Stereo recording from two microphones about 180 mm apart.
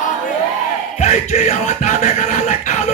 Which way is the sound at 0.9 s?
40° left (ahead or behind).